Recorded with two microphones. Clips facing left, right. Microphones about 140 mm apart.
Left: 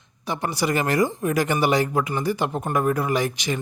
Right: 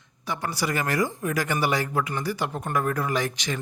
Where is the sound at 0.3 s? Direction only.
20° left (ahead or behind).